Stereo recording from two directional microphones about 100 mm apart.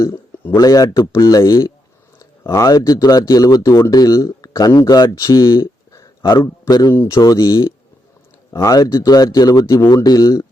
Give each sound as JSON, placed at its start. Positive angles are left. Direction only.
{"t": 0.5, "sound": "a man's voice", "side_deg": 35}
{"t": 8.5, "sound": "speech", "side_deg": 35}